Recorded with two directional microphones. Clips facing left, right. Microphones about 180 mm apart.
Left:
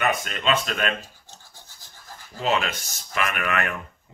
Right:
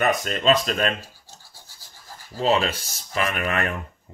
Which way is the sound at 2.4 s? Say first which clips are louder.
Right 3 dB; 35° right (ahead or behind).